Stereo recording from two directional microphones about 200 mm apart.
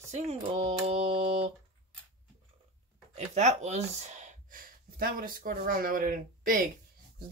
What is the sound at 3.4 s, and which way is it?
Speech, 35° right (ahead or behind).